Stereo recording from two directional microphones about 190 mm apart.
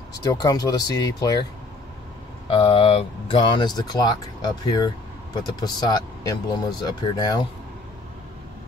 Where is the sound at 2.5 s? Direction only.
30° left (ahead or behind).